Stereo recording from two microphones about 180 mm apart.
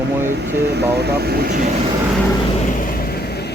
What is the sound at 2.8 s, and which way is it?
Vehicle, 55° left (ahead or behind).